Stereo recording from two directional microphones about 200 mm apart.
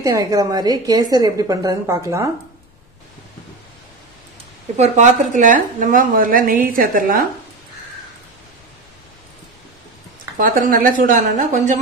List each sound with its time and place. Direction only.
0.0 s a woman's voice: 15° right (ahead or behind)
4.7 s a woman's voice: 35° right (ahead or behind)
10.3 s speech: 45° right (ahead or behind)